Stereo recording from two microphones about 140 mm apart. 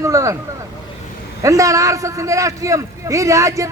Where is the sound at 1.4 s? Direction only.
25° right (ahead or behind).